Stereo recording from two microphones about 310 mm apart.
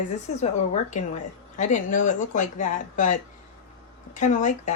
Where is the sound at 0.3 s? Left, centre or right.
Left.